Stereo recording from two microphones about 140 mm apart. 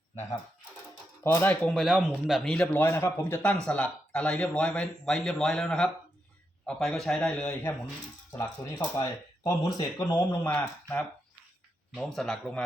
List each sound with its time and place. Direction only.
1.2 s speech: 15° left (ahead or behind)
1.8 s a man's voice: 5° right (ahead or behind)
8.3 s speech: 15° left (ahead or behind)
10.1 s a man's voice: 15° left (ahead or behind)